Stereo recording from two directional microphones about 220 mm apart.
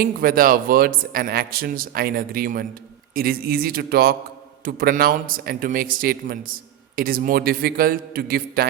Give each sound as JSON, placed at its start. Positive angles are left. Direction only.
{"t": 0.0, "sound": "a man's voice", "side_deg": -40}